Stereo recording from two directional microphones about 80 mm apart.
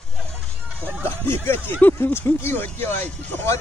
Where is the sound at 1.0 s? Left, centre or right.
Left.